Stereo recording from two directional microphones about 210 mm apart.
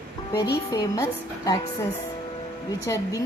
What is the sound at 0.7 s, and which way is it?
Speech, 15° left (ahead or behind).